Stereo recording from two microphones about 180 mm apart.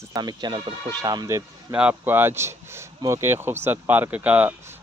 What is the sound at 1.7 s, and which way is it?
Speech, 10° right (ahead or behind).